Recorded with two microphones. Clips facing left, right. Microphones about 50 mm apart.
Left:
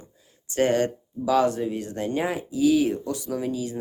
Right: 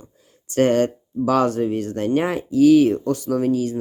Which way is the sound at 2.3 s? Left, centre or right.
Right.